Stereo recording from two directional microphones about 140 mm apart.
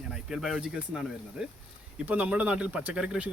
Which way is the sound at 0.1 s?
5° right (ahead or behind).